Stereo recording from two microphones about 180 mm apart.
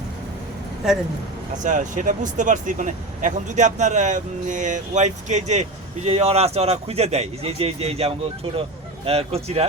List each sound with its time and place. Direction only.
1.6 s speech: 45° right (ahead or behind)